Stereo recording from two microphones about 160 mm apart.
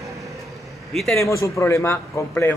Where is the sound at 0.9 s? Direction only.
Centre (ahead or behind).